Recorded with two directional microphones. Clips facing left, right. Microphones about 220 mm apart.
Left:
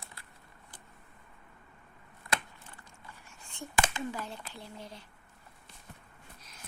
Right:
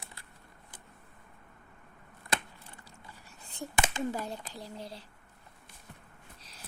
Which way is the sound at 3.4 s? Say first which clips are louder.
Right 3 dB; 35° right (ahead or behind).